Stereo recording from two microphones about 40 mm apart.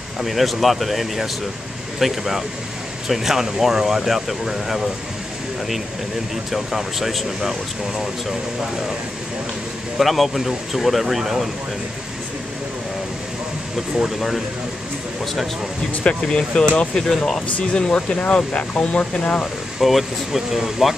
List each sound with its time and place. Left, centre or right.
0.2 s speech: centre
6.5 s speech: centre
9.9 s speech: centre
15.9 s speech: left
16.2 s speech: centre
17.6 s speech: left
19.8 s speech: centre